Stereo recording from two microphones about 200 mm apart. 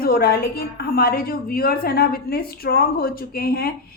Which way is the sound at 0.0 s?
50° left (ahead or behind).